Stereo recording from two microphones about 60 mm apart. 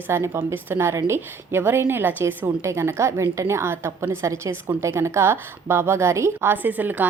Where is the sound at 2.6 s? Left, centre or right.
Right.